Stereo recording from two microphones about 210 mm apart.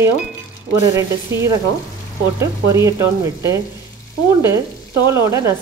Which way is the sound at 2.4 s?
15° right (ahead or behind).